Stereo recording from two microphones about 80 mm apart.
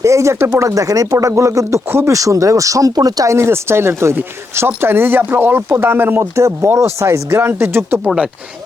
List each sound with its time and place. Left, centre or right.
0.0 s speech: right
3.3 s speech: right